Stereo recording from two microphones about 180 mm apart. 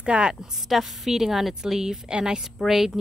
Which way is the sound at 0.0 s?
5° right (ahead or behind).